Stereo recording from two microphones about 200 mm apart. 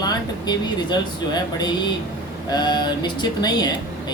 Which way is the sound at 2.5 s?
20° left (ahead or behind).